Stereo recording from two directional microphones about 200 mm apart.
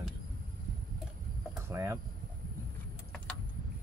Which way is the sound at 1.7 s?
15° right (ahead or behind).